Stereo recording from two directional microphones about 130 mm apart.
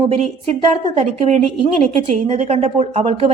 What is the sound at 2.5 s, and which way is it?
Speech, 60° right (ahead or behind).